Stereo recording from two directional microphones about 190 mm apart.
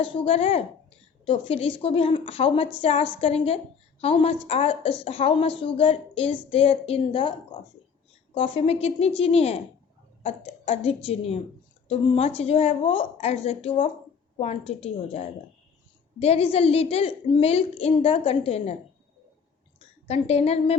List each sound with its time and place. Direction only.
0.0 s a woman's voice: 30° left (ahead or behind)
8.4 s a woman's voice: 30° left (ahead or behind)
20.1 s a woman's voice: 35° left (ahead or behind)